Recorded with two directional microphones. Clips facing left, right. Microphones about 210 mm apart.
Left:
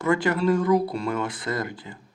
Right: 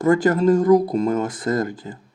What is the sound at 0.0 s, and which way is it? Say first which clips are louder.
Speech: right 6 dB; 50° right (ahead or behind).